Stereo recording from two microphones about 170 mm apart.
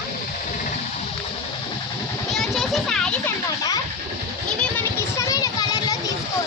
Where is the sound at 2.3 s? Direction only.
Centre (ahead or behind).